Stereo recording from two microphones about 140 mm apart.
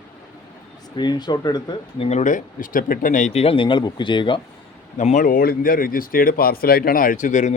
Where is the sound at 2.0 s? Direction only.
55° left (ahead or behind); by 4.4 s 35° left (ahead or behind).